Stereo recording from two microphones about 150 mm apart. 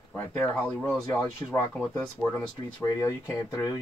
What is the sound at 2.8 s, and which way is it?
Speech, 20° left (ahead or behind).